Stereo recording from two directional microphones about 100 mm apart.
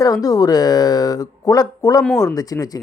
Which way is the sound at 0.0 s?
35° left (ahead or behind).